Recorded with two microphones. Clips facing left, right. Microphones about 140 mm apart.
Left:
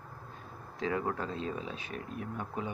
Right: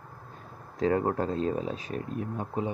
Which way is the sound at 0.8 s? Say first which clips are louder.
Right 7 dB; 40° right (ahead or behind).